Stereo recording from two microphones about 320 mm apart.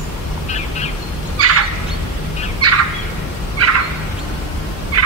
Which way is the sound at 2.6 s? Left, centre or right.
Right.